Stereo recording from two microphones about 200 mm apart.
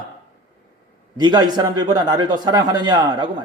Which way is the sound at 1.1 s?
20° right (ahead or behind).